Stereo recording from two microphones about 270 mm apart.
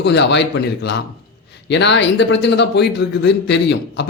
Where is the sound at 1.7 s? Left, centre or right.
Left.